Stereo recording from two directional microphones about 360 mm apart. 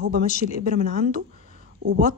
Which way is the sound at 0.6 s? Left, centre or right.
Right.